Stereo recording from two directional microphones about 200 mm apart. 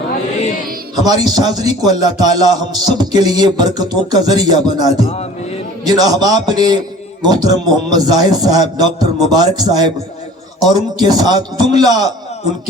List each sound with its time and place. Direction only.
1.0 s a man's voice: 20° right (ahead or behind)